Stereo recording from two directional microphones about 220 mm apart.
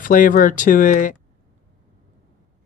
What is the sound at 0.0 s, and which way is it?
Speech, 40° left (ahead or behind).